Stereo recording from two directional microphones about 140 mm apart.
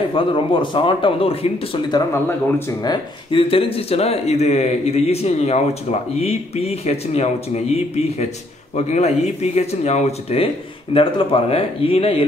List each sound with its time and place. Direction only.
0.1 s speech: 35° left (ahead or behind)
2.8 s speech: 35° left (ahead or behind)